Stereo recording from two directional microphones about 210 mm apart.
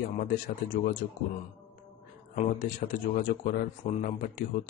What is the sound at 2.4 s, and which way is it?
A man's voice, 40° left (ahead or behind).